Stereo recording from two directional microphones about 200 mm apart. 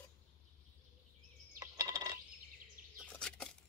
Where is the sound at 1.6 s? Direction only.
15° right (ahead or behind).